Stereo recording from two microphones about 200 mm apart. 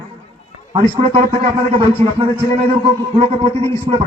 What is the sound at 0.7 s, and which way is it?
A man's voice, 30° right (ahead or behind).